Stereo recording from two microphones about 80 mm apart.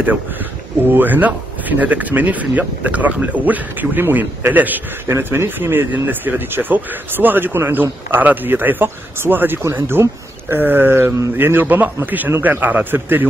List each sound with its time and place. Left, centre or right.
0.0 s speech: right